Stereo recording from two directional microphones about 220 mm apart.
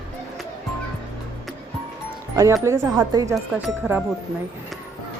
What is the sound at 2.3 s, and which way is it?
Speech, 15° right (ahead or behind).